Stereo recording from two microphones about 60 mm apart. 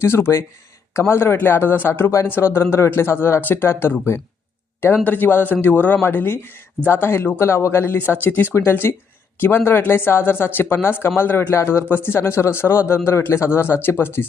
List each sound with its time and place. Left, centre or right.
0.0 s speech: left
5.0 s speech: left
8.5 s speech: left